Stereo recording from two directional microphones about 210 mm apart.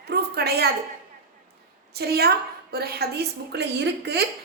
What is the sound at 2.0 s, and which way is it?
A woman's voice, 50° right (ahead or behind).